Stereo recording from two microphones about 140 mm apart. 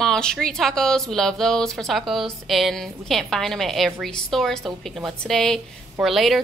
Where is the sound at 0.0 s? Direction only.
5° left (ahead or behind).